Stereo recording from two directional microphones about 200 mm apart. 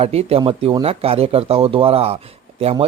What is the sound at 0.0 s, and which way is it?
Speech, 30° right (ahead or behind).